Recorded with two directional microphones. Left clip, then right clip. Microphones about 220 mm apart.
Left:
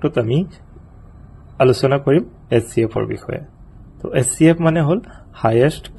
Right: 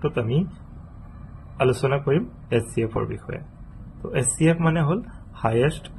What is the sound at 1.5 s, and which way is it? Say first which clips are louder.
Speech: left 7 dB; 35° left (ahead or behind).